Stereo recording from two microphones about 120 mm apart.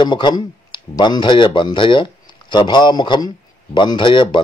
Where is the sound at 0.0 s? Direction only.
40° left (ahead or behind).